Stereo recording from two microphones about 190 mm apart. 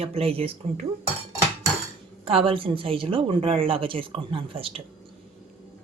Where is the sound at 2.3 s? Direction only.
30° right (ahead or behind).